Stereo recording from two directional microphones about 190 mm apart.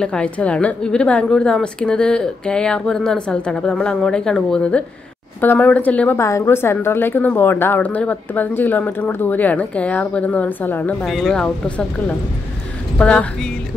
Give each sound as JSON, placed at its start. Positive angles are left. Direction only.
{"t": 0.0, "sound": "a woman's voice", "side_deg": 5}
{"t": 12.9, "sound": "a woman's voice", "side_deg": 5}